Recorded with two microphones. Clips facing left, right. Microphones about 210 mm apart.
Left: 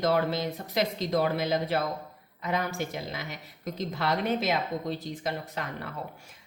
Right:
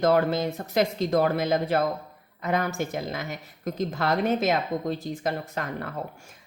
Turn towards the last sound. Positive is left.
turn(degrees=-50)  # may be behind; listen again after turning